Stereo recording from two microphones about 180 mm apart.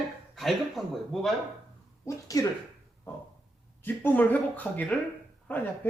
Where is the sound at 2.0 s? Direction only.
15° left (ahead or behind).